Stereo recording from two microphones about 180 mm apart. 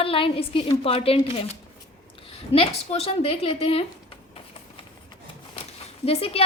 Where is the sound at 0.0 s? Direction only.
30° left (ahead or behind).